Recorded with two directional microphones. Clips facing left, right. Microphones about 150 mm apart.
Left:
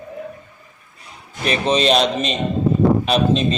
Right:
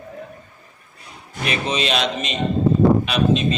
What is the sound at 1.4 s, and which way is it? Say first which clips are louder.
A man's voice: left 6 dB; 35° left (ahead or behind).